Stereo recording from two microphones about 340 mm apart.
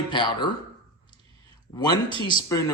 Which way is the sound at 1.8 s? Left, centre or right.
Centre.